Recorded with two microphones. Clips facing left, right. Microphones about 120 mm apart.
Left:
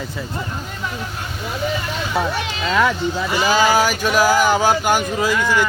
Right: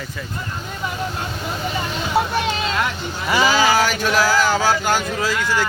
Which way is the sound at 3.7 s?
10° left (ahead or behind).